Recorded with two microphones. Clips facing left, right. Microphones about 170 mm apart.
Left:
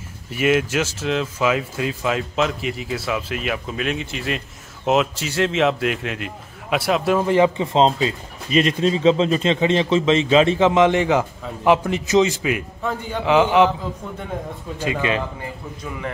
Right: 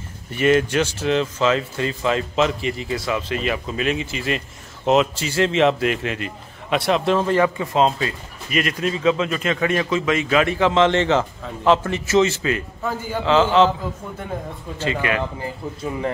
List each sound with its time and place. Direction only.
0.3 s a man's voice: 5° left (ahead or behind)
14.8 s speech: 15° left (ahead or behind)